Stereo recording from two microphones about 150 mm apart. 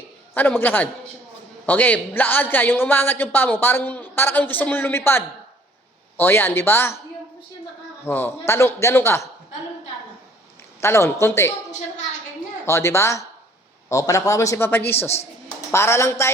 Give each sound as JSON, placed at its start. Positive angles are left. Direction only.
{"t": 0.3, "sound": "a woman's voice", "side_deg": 10}
{"t": 8.0, "sound": "a woman's voice", "side_deg": 15}
{"t": 10.8, "sound": "a woman's voice", "side_deg": 15}
{"t": 12.6, "sound": "a man's voice", "side_deg": 20}